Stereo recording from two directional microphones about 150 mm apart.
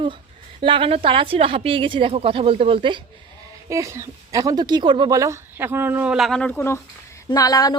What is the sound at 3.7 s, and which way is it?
Speech, 20° right (ahead or behind).